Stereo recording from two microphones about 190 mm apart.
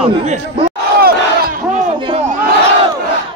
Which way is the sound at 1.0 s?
45° right (ahead or behind).